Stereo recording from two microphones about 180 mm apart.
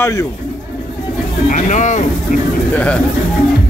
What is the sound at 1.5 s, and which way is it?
Speech, 40° left (ahead or behind).